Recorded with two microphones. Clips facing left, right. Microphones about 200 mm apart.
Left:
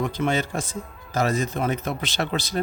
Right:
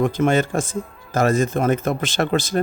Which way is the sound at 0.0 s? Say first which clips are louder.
Right 6 dB; 50° right (ahead or behind).